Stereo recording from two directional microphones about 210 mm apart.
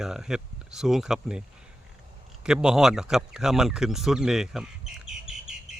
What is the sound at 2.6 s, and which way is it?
Speech, 5° right (ahead or behind).